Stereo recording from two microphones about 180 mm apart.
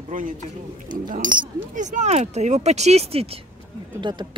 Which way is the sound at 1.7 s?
40° right (ahead or behind).